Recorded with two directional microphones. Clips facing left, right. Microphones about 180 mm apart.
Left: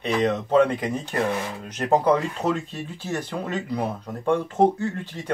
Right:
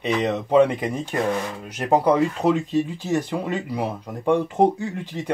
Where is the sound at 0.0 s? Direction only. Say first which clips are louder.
Even; 10° right (ahead or behind).